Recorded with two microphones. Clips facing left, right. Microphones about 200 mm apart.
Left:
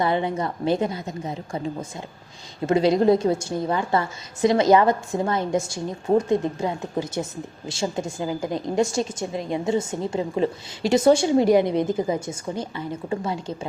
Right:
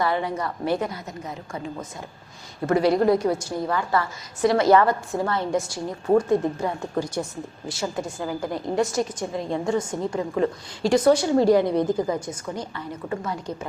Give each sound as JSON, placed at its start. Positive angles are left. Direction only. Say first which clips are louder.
{"t": 0.0, "sound": "a woman's voice", "louder": "left 2 dB", "side_deg": 20}